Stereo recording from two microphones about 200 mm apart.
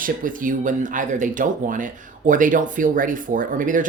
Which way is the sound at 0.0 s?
40° right (ahead or behind).